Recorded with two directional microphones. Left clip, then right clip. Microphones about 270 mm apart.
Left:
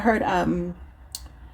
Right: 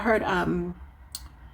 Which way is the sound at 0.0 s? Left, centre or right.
Left.